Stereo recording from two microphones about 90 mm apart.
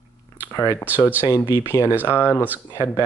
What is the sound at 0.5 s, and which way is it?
Speech, 35° left (ahead or behind).